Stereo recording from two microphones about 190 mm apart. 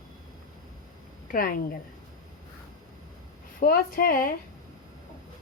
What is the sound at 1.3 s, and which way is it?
Speech, 50° left (ahead or behind).